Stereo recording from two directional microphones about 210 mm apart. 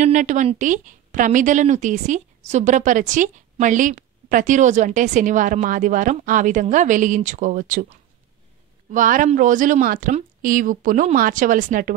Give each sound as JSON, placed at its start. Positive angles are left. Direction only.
{"t": 0.0, "sound": "a woman's voice", "side_deg": -35}